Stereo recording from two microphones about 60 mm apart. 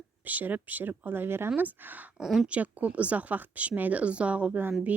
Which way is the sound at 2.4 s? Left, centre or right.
Right.